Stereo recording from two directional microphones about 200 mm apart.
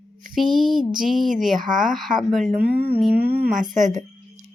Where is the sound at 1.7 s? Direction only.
40° right (ahead or behind).